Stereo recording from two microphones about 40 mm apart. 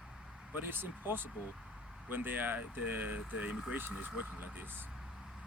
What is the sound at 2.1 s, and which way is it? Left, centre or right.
Speech, right.